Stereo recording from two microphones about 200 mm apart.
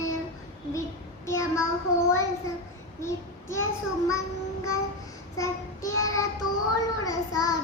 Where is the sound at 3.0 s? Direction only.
15° left (ahead or behind).